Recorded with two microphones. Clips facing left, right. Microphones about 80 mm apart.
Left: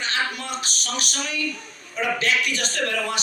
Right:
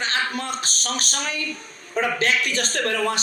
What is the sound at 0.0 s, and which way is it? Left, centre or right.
A man's voice, right.